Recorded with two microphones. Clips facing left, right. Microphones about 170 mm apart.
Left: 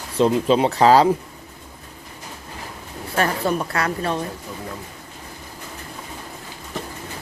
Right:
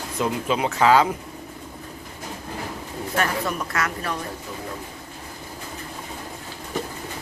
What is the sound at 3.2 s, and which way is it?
Speech, 30° left (ahead or behind).